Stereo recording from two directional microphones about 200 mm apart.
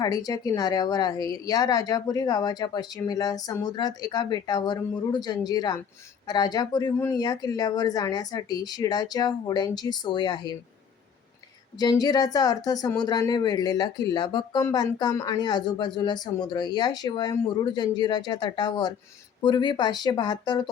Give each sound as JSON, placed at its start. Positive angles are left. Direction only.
{"t": 0.0, "sound": "speech", "side_deg": 20}
{"t": 11.8, "sound": "speech", "side_deg": 20}